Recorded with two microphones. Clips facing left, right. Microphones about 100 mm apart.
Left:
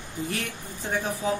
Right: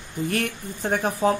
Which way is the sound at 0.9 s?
55° right (ahead or behind).